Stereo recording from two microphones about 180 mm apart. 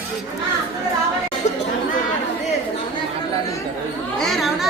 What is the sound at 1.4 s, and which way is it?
Chatter, 40° left (ahead or behind).